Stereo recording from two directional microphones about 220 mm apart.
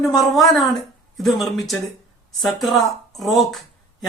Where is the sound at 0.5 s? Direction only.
Centre (ahead or behind).